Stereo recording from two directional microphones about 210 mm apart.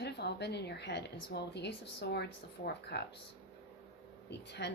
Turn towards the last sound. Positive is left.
turn(degrees=55)  # may be behind; listen again after turning